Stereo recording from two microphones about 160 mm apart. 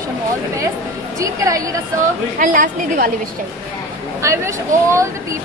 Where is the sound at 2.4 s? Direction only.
60° right (ahead or behind).